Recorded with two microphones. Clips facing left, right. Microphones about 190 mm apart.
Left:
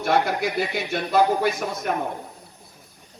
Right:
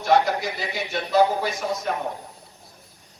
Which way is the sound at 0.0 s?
55° left (ahead or behind).